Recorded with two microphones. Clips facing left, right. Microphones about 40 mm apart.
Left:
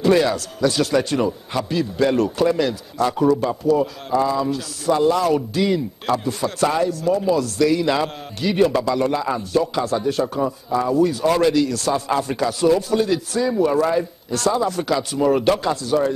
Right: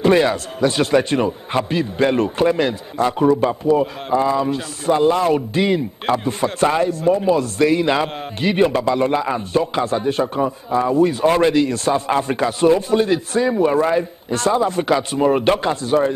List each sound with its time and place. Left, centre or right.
0.0 s a man's voice: right